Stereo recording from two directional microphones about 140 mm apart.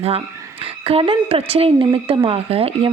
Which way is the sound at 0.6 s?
40° right (ahead or behind).